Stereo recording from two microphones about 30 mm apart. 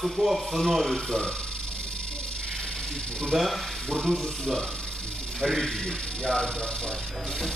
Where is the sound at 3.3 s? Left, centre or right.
Centre.